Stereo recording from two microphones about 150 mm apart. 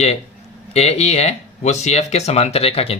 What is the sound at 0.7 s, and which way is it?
Speech, 45° left (ahead or behind).